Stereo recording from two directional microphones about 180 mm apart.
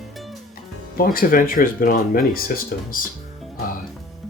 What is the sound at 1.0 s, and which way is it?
Speech, 50° left (ahead or behind).